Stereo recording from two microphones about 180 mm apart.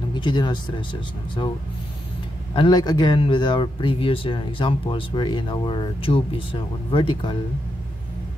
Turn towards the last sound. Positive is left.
turn(degrees=25)  # may be behind; listen again after turning